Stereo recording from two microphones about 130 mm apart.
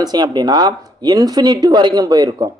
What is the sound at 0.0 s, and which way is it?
Speech, 30° right (ahead or behind).